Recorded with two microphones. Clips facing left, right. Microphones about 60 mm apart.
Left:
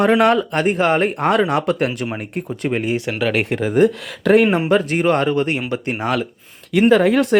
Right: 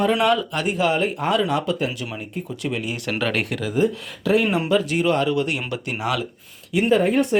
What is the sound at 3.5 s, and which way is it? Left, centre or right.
Speech, left.